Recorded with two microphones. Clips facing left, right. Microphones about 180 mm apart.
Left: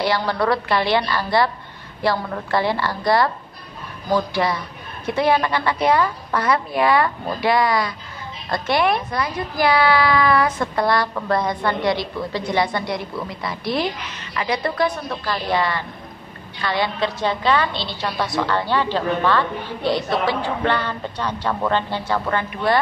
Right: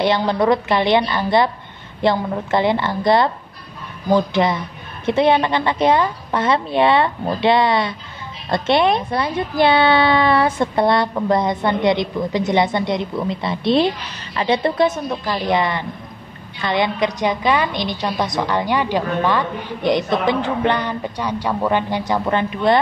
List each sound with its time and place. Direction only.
0.0 s a woman's voice: 20° right (ahead or behind)